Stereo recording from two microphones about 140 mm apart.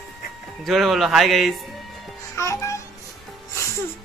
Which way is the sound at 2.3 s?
20° left (ahead or behind).